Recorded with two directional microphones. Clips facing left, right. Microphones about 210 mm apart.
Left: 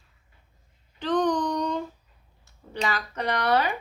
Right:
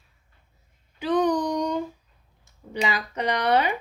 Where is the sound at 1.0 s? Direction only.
10° right (ahead or behind).